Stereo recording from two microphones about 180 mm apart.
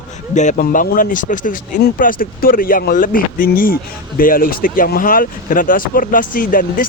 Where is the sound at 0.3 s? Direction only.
45° left (ahead or behind).